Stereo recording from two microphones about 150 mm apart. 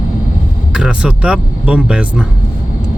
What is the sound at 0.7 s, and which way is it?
Speech, 5° right (ahead or behind).